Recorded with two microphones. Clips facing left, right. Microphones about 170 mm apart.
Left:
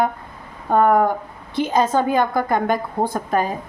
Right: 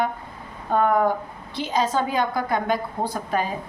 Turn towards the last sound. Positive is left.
turn(degrees=50)  # may be behind; listen again after turning